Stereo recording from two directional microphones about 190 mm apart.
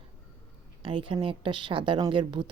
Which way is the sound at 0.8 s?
25° right (ahead or behind).